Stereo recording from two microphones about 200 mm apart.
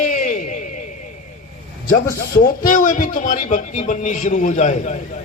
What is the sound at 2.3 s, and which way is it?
Speech, 45° left (ahead or behind).